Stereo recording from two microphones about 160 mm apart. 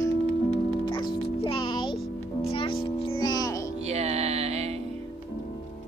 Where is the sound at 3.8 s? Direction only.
40° right (ahead or behind).